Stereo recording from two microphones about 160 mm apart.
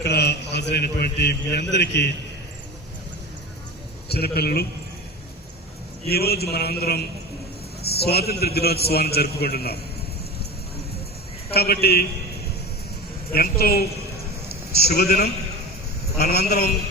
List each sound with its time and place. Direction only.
0.0 s a man's voice: 90° left
4.1 s a man's voice: 80° left
6.1 s a man's voice: 80° left
11.5 s a man's voice: 80° left
13.3 s a woman's voice: 70° left (ahead or behind)
14.8 s a woman's voice: 70° left (ahead or behind)